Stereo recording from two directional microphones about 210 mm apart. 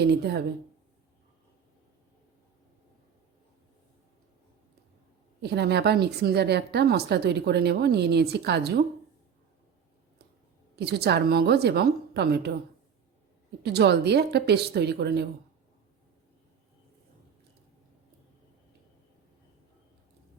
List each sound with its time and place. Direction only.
0.0 s speech: 50° right (ahead or behind)
5.4 s speech: 50° right (ahead or behind)
10.8 s speech: 50° right (ahead or behind)
13.6 s speech: 50° right (ahead or behind)